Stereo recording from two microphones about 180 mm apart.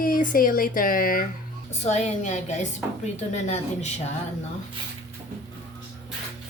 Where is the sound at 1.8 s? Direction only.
40° left (ahead or behind).